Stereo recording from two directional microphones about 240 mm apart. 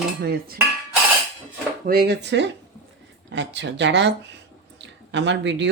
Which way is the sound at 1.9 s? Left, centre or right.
Right.